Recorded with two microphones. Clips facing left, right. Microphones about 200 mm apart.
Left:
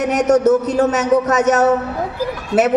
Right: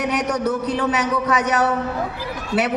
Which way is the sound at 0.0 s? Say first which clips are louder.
Left 8 dB; 45° left (ahead or behind).